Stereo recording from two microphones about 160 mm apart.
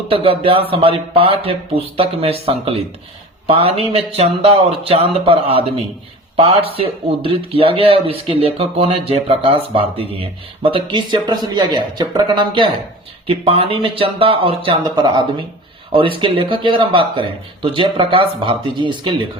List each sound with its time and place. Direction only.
0.1 s speech: 35° right (ahead or behind)